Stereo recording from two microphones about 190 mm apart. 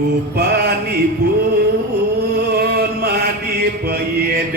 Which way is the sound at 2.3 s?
60° right (ahead or behind).